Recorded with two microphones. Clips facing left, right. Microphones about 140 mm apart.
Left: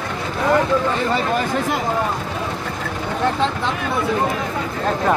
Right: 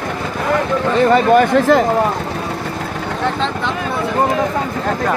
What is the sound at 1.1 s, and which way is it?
Speech, 80° right.